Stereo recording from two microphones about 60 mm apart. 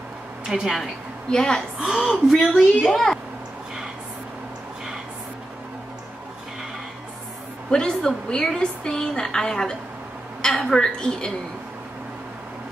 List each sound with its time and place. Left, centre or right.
0.5 s speech: centre
1.3 s a woman's voice: centre
1.8 s a woman's voice: centre
7.7 s a woman's voice: centre